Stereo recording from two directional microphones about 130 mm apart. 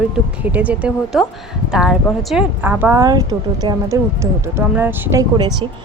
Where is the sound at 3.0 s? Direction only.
30° right (ahead or behind).